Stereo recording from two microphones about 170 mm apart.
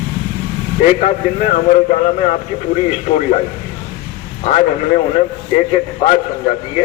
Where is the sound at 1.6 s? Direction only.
45° left (ahead or behind).